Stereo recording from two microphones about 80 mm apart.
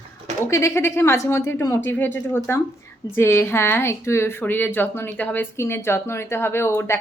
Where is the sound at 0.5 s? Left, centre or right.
Left.